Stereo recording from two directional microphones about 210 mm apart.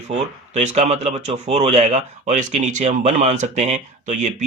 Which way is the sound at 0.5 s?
30° right (ahead or behind).